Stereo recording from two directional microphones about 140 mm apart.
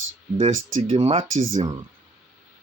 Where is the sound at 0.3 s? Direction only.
40° right (ahead or behind).